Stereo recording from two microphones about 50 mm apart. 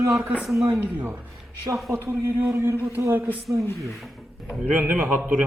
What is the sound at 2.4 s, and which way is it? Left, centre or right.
Speech, right.